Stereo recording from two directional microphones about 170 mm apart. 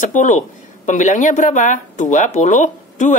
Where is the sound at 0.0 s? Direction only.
50° left (ahead or behind).